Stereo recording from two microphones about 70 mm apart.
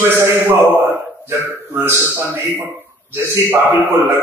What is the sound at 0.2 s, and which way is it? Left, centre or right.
A man's voice, right.